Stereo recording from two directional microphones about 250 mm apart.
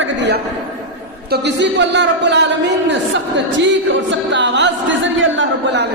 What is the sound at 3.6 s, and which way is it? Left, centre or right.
Speech, right.